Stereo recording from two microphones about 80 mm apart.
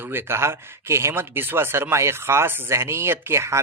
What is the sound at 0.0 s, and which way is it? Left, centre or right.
A man's voice, right.